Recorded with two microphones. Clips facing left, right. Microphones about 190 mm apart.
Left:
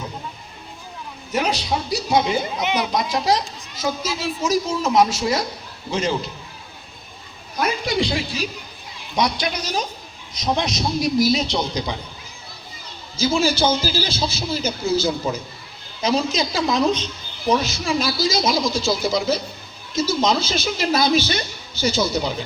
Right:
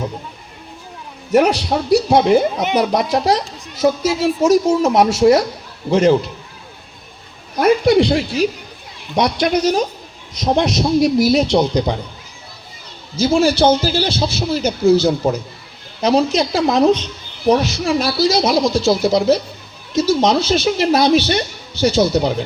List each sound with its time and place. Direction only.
1.3 s a woman's voice: 65° right (ahead or behind)
7.5 s a woman's voice: 60° right (ahead or behind)
13.1 s a woman's voice: 65° right (ahead or behind)